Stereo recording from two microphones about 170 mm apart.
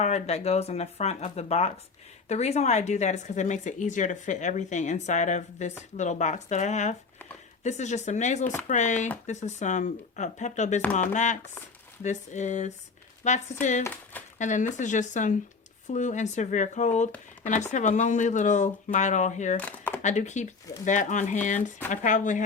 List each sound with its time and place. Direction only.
0.0 s speech: 40° left (ahead or behind)
19.5 s a sound: 10° left (ahead or behind)
20.0 s speech: 45° left (ahead or behind)